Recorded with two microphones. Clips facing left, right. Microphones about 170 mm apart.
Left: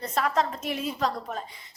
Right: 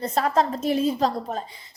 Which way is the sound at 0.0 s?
30° right (ahead or behind).